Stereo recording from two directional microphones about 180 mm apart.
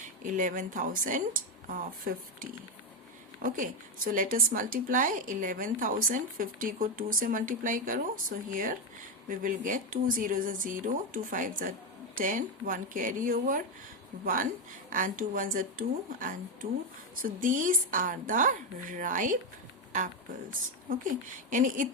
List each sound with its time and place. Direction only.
0.0 s a woman's voice: 45° right (ahead or behind)
14.8 s a woman's voice: 50° right (ahead or behind)
20.9 s a woman's voice: 45° right (ahead or behind)